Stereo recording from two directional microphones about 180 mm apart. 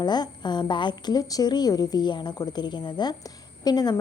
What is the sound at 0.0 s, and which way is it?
A woman's voice, 25° left (ahead or behind).